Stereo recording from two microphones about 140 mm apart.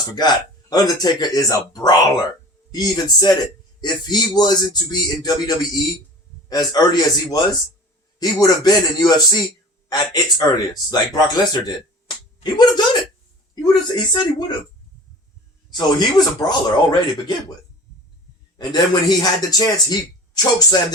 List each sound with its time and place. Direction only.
0.2 s speech: 30° left (ahead or behind)
15.7 s speech: 30° left (ahead or behind)
18.5 s speech: 30° left (ahead or behind)